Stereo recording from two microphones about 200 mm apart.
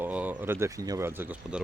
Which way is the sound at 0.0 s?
10° right (ahead or behind).